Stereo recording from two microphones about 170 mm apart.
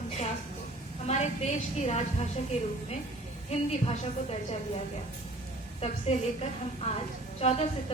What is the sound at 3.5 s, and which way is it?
Speech, 35° left (ahead or behind).